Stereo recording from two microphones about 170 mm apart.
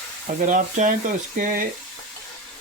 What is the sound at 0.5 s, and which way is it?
Speech, 50° right (ahead or behind).